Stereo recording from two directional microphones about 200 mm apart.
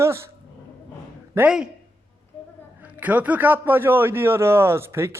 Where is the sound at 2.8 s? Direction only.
5° right (ahead or behind).